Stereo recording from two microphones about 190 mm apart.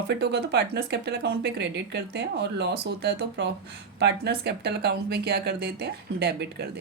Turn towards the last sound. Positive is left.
turn(degrees=-60)  # may be behind; listen again after turning